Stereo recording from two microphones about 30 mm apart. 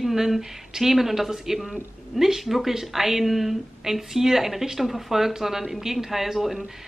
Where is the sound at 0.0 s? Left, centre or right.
Centre.